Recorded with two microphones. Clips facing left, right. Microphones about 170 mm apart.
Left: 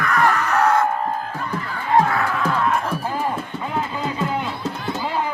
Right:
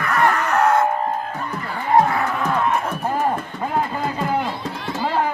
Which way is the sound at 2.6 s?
10° right (ahead or behind).